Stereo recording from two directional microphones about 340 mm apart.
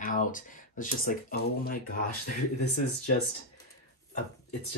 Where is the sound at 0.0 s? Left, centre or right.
Left.